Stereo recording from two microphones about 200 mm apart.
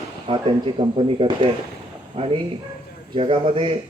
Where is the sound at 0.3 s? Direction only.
25° right (ahead or behind).